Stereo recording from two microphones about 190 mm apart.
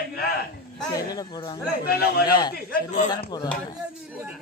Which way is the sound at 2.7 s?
40° left (ahead or behind).